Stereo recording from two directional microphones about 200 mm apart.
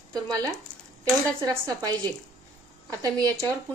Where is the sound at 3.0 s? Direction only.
20° right (ahead or behind).